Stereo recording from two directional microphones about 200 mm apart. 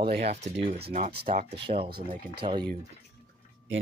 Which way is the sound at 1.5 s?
30° right (ahead or behind).